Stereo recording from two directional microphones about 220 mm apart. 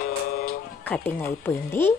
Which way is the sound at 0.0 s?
40° left (ahead or behind).